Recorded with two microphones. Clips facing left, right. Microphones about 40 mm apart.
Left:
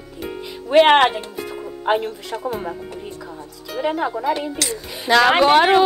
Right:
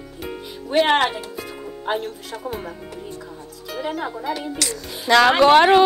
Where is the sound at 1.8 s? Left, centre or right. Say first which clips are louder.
Left 5 dB; left.